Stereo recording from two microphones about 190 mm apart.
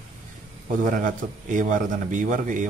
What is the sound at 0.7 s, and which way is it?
A man's voice, 45° right (ahead or behind).